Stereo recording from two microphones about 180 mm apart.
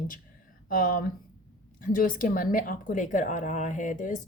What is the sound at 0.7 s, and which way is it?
Speech, 50° left (ahead or behind).